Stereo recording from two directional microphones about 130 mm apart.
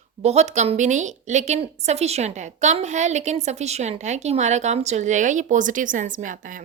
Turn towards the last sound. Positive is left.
turn(degrees=-90)